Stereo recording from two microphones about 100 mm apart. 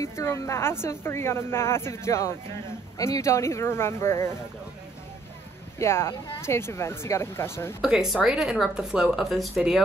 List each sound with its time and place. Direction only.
0.0 s speech: 25° left (ahead or behind)
5.8 s speech: 25° left (ahead or behind)
7.8 s speech: 5° right (ahead or behind)